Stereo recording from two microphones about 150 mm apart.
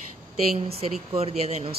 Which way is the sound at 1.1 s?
45° right (ahead or behind).